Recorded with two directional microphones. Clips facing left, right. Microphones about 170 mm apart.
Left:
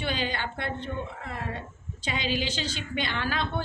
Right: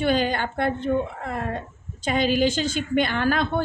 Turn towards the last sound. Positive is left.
turn(degrees=-50)  # may be behind; listen again after turning